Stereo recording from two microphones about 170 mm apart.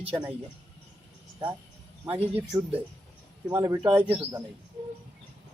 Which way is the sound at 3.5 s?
15° right (ahead or behind).